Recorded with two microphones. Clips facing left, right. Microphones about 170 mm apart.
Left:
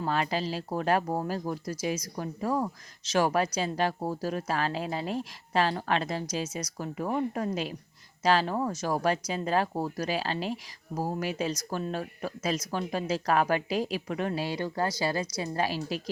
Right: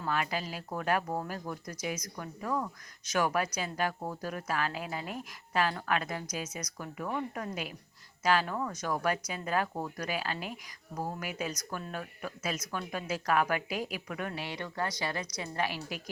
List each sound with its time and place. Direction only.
0.0 s a woman's voice: 30° left (ahead or behind)